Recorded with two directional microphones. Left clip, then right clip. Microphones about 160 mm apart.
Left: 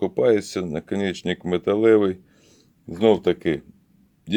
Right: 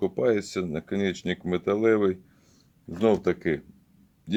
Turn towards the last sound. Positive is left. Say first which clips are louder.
# left 5 dB
turn(degrees=25)  # may be behind; listen again after turning